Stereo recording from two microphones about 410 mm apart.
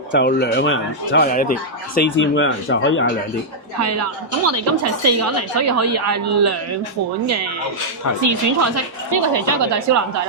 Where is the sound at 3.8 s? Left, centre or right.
Right.